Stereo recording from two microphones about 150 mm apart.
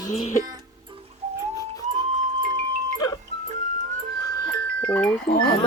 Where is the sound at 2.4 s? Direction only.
55° right (ahead or behind).